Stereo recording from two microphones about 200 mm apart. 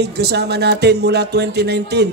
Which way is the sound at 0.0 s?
55° right (ahead or behind).